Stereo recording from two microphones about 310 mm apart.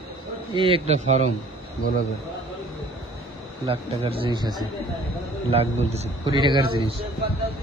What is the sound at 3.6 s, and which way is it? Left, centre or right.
A man's voice, centre.